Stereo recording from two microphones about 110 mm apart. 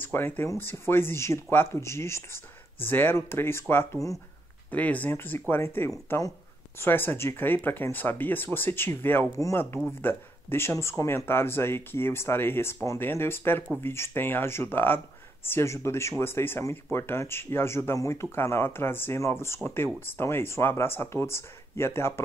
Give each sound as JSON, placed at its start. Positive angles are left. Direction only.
{"t": 0.0, "sound": "speech", "side_deg": 20}